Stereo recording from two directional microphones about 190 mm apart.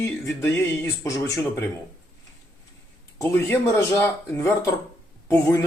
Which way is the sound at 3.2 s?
15° left (ahead or behind).